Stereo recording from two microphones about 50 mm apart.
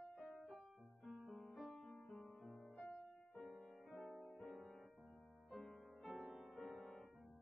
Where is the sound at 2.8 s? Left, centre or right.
Centre.